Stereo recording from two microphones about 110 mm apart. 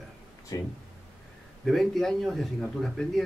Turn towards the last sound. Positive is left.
turn(degrees=5)  # may be behind; listen again after turning